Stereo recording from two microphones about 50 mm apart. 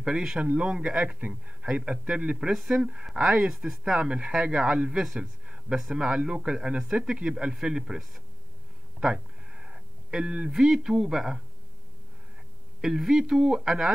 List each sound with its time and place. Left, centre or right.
0.0 s speech: centre
2.5 s speech: centre
9.0 s a sound: centre
10.5 s speech: centre
12.8 s speech: centre